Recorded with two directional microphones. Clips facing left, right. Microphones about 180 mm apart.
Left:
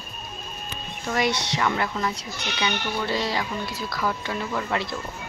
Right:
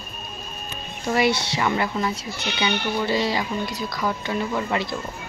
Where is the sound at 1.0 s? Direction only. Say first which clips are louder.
Right 4 dB; 5° right (ahead or behind).